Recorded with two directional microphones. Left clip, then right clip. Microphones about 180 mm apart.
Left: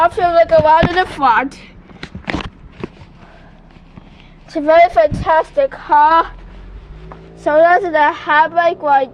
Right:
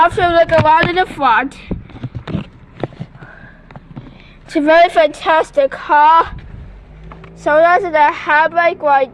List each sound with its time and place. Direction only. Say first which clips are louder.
0.0 s a woman's voice: right 1 dB; 10° right (ahead or behind)
1.3 s a woman's voice: even; 20° right (ahead or behind)
4.5 s a woman's voice: even; 30° right (ahead or behind); by 6.3 s 10° right (ahead or behind)
7.4 s a woman's voice: even; centre (ahead or behind)